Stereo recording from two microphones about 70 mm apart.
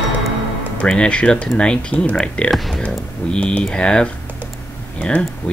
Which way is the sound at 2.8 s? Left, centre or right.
Centre.